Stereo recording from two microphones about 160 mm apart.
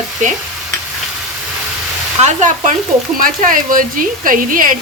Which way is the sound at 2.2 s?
45° right (ahead or behind).